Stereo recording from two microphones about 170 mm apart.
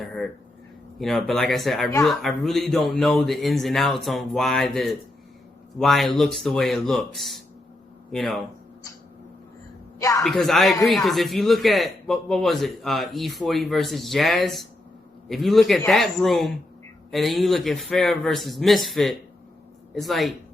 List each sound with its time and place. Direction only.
0.0 s a sound: centre (ahead or behind)
0.9 s speech: centre (ahead or behind)
10.0 s a woman's voice: 20° left (ahead or behind)
10.2 s speech: centre (ahead or behind)